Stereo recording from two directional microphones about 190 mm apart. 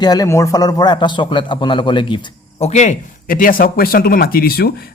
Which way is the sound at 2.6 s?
35° left (ahead or behind).